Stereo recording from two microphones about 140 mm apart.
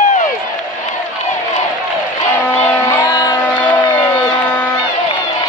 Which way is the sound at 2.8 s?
20° left (ahead or behind).